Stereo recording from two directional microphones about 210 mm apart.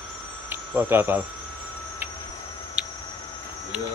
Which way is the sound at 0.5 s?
10° right (ahead or behind).